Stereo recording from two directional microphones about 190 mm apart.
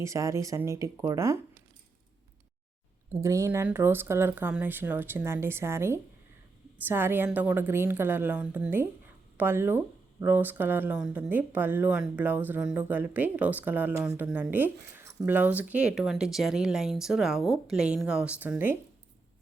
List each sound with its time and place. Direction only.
0.0 s speech: 15° right (ahead or behind)
3.1 s speech: 15° right (ahead or behind)